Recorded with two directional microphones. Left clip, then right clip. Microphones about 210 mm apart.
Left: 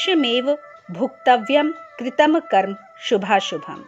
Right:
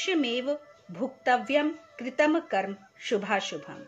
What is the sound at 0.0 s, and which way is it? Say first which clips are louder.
Speech: left 9 dB; 35° left (ahead or behind).